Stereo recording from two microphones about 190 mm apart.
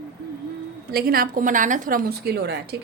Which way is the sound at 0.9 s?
50° right (ahead or behind).